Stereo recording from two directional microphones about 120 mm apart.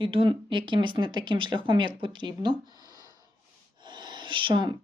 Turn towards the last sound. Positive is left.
turn(degrees=-40)  # may be behind; listen again after turning